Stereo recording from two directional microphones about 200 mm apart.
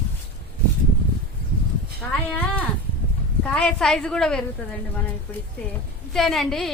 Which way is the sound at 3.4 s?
5° left (ahead or behind).